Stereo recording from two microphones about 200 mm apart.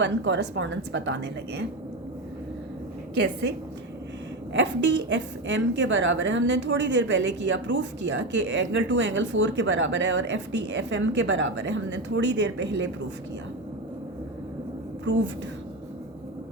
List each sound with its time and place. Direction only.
0.0 s a woman's voice: 60° right (ahead or behind)
4.5 s a woman's voice: 60° right (ahead or behind)
15.1 s a woman's voice: 60° right (ahead or behind)